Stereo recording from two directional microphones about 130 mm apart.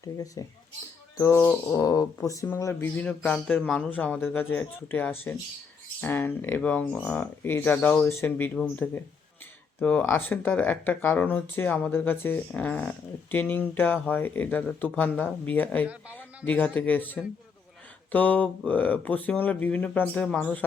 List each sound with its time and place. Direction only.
0.0 s speech: 25° left (ahead or behind)
1.8 s speech: 25° left (ahead or behind)
3.0 s speech: 10° left (ahead or behind)
9.8 s speech: 15° left (ahead or behind)
15.9 s speech: 10° right (ahead or behind)
16.5 s speech: 10° left (ahead or behind)